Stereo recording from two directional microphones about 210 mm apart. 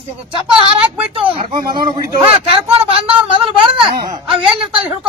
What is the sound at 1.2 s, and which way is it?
Speech, 25° right (ahead or behind).